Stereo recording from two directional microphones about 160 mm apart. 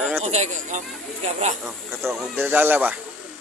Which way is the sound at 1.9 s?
15° right (ahead or behind).